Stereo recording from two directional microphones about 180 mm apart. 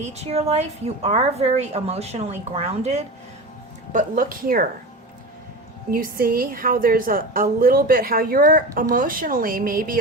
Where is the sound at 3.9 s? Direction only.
50° right (ahead or behind).